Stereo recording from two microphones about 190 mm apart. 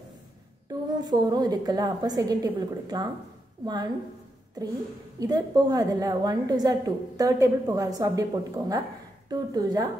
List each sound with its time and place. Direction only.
0.9 s a woman's voice: 20° right (ahead or behind)
5.2 s a woman's voice: 20° right (ahead or behind)